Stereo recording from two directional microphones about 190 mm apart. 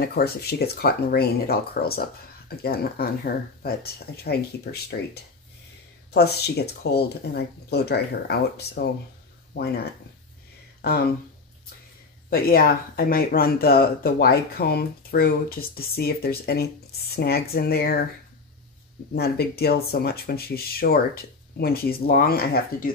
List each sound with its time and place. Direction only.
0.0 s speech: 55° left (ahead or behind)
10.8 s speech: 55° left (ahead or behind)
12.3 s speech: 50° left (ahead or behind)
19.1 s speech: 55° left (ahead or behind)